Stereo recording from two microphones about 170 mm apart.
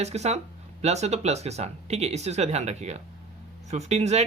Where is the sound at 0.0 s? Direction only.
40° right (ahead or behind).